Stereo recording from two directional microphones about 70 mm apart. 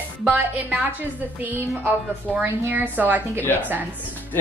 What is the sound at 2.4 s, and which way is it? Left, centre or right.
A woman's voice, right.